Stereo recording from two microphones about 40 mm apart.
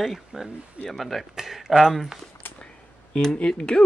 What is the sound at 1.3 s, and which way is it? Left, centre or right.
Speech, centre.